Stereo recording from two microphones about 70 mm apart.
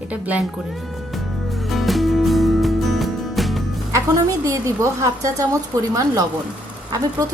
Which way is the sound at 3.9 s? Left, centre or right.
Right.